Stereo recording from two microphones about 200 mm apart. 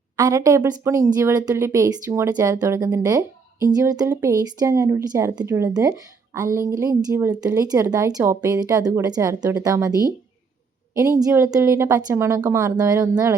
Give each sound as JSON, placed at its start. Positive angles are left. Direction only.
{"t": 0.2, "sound": "speech", "side_deg": -15}